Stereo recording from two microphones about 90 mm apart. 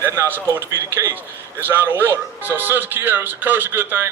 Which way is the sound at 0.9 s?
25° right (ahead or behind).